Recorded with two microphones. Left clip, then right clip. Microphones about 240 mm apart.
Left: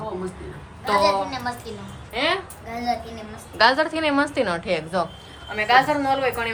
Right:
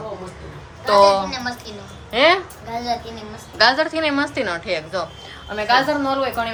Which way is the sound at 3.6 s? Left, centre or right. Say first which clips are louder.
Right 2 dB; centre.